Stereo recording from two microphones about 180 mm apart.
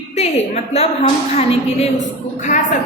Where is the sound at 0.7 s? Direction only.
35° left (ahead or behind).